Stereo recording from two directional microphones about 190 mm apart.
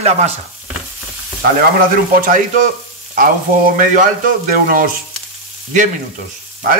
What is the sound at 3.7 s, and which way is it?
Speech, 40° right (ahead or behind).